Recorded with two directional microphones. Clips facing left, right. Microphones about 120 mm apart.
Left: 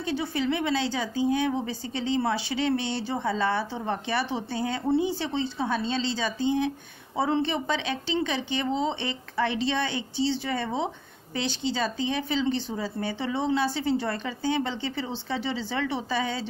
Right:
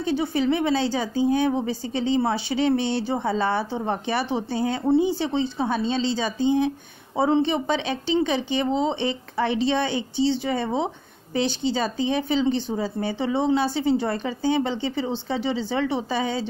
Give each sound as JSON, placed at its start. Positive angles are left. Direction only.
{"t": 0.1, "sound": "a woman's voice", "side_deg": -25}